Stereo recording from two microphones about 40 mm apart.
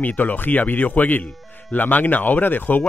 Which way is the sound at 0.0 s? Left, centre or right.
Left.